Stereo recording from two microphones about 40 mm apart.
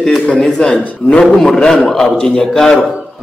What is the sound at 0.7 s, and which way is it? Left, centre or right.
Speech, left.